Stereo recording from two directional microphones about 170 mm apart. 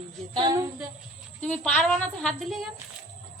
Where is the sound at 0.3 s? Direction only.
25° right (ahead or behind).